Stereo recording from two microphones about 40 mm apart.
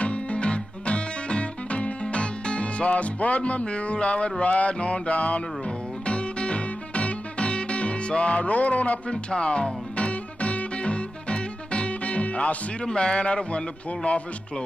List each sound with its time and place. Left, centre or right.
0.0 s music: left
9.1 s music: left
12.8 s a man's voice: left